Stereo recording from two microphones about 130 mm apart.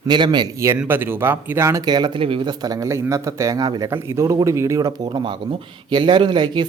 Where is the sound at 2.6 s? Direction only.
25° right (ahead or behind).